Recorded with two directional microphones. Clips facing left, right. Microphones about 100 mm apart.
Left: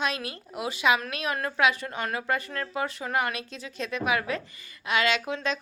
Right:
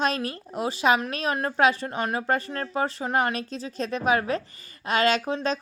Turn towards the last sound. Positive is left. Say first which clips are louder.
# right 3 dB
turn(degrees=-40)  # may be behind; listen again after turning